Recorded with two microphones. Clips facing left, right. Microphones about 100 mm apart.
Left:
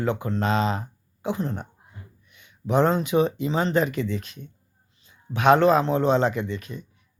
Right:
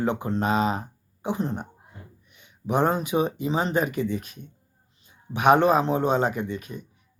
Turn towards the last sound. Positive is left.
turn(degrees=-10)  # may be behind; listen again after turning